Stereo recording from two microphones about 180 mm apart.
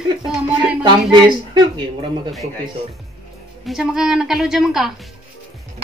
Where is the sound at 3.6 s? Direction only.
Centre (ahead or behind).